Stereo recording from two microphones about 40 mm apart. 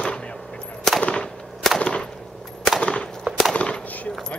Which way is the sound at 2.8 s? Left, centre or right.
Left.